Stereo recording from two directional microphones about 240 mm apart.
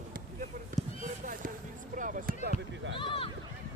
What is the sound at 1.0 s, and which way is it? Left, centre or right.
Basketball bounce, right.